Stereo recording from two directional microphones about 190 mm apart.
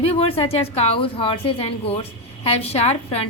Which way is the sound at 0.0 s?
30° left (ahead or behind).